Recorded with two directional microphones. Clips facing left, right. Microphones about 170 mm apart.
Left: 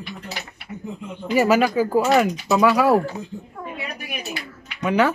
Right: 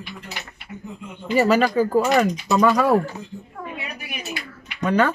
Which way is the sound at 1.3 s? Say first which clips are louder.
Even; 10° left (ahead or behind).